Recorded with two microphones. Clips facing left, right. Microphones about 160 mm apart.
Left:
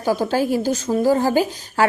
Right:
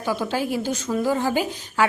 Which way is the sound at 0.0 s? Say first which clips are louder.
Left 5 dB; 40° left (ahead or behind).